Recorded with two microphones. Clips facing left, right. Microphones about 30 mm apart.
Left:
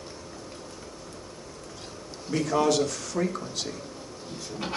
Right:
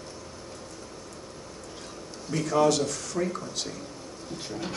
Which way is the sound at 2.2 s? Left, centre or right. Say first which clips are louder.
Right 1 dB; centre.